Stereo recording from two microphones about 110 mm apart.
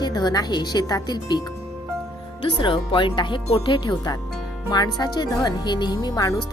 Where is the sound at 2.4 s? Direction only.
50° left (ahead or behind).